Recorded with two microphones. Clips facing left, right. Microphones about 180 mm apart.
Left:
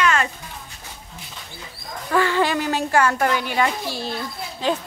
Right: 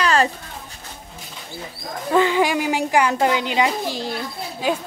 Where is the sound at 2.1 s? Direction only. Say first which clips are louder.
Right 2 dB; 15° right (ahead or behind).